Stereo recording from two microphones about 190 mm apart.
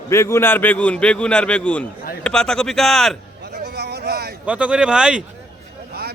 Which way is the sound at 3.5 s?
60° right (ahead or behind).